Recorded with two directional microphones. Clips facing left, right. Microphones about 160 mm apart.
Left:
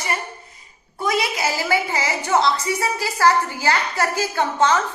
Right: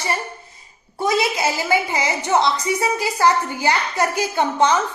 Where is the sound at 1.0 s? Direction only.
25° right (ahead or behind).